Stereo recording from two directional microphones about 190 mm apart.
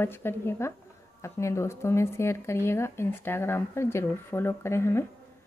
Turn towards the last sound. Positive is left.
turn(degrees=15)  # may be behind; listen again after turning